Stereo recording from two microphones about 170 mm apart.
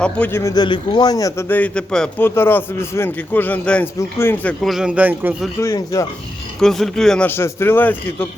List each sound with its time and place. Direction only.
0.0 s a man's voice: 10° left (ahead or behind)
4.6 s a man's voice: centre (ahead or behind)
5.5 s speech: 20° left (ahead or behind)
6.6 s a man's voice: centre (ahead or behind)